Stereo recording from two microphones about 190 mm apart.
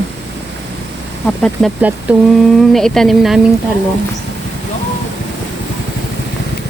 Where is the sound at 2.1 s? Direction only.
5° right (ahead or behind).